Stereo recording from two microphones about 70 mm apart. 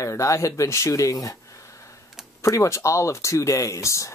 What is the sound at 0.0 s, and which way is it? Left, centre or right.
Speech, left.